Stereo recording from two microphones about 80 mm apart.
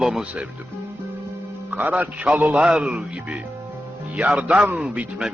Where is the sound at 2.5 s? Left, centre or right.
Centre.